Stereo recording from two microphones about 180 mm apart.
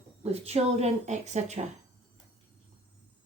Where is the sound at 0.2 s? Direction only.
35° right (ahead or behind).